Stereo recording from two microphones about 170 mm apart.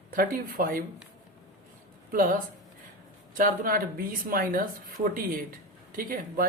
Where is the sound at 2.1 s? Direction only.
55° right (ahead or behind).